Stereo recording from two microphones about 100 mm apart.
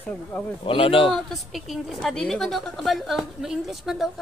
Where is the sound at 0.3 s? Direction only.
10° left (ahead or behind).